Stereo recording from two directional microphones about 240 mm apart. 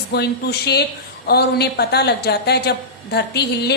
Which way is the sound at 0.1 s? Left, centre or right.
Left.